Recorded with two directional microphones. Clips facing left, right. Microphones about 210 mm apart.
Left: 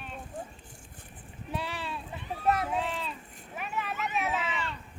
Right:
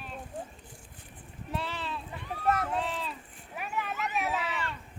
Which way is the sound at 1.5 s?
10° left (ahead or behind).